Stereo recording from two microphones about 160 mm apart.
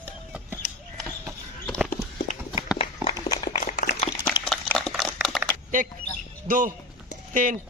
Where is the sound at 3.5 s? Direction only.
60° left (ahead or behind).